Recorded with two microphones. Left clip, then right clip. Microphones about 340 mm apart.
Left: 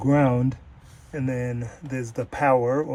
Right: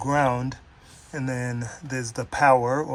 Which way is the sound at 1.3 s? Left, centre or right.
Right.